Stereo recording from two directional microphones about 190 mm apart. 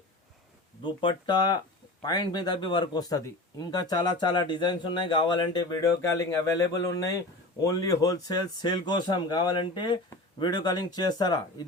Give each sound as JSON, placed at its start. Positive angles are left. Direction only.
{"t": 0.9, "sound": "speech", "side_deg": 25}